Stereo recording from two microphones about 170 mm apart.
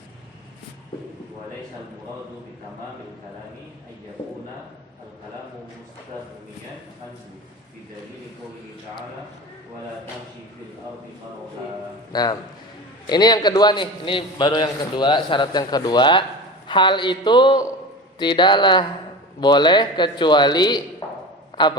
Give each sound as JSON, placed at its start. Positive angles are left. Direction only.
{"t": 12.1, "sound": "a man's voice", "side_deg": 25}